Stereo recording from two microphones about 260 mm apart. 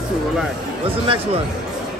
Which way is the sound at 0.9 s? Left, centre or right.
Right.